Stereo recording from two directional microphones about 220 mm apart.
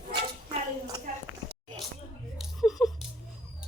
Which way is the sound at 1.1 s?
35° right (ahead or behind).